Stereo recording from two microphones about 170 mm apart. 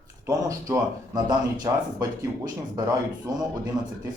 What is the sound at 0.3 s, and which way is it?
Speech, 20° right (ahead or behind).